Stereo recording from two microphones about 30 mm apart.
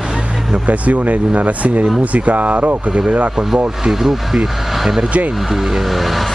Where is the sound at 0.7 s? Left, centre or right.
Right.